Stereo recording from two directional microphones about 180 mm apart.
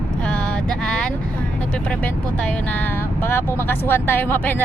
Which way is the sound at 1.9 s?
5° left (ahead or behind).